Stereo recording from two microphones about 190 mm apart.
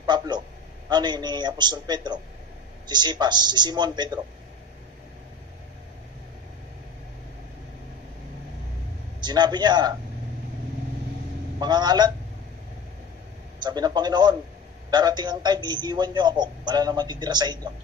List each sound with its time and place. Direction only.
0.0 s a sound: 25° right (ahead or behind)
0.8 s a man's voice: 20° right (ahead or behind)
9.2 s a man's voice: 25° right (ahead or behind)
11.6 s a man's voice: 20° right (ahead or behind)
13.6 s a man's voice: 20° right (ahead or behind)